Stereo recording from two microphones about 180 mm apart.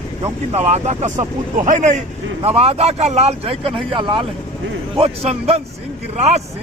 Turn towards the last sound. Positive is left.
turn(degrees=-35)  # may be behind; listen again after turning